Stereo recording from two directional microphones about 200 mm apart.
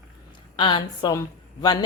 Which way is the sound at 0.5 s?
25° left (ahead or behind).